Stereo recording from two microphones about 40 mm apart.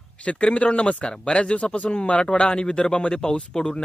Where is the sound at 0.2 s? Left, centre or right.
Left.